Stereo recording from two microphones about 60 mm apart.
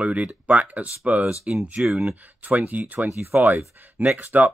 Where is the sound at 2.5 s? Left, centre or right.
Right.